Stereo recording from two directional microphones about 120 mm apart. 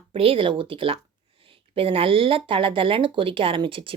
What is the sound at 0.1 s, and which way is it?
A woman's voice, 50° right (ahead or behind).